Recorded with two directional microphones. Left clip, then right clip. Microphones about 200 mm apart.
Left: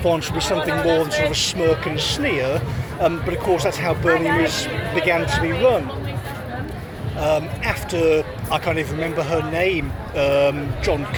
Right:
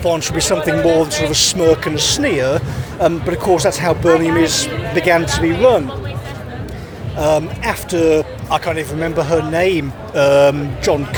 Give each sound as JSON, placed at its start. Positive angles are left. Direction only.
{"t": 0.0, "sound": "speech", "side_deg": -45}
{"t": 7.2, "sound": "speech", "side_deg": -35}